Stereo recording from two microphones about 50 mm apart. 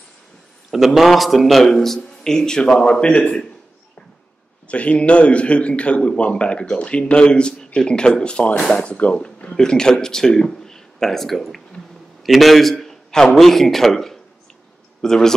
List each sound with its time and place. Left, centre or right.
0.7 s speech: centre; by 3.4 s left
4.6 s a man's voice: left; by 15.3 s centre